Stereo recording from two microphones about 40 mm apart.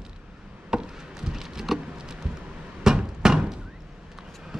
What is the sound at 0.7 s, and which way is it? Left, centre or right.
Chop, centre.